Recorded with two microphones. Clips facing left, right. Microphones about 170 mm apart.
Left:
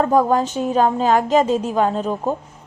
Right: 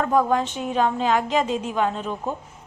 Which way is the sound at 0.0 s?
40° left (ahead or behind).